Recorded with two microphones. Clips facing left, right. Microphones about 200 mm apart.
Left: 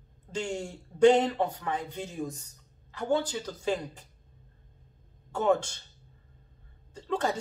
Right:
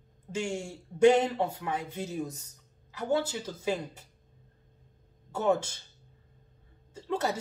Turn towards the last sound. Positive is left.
turn(degrees=-5)  # may be behind; listen again after turning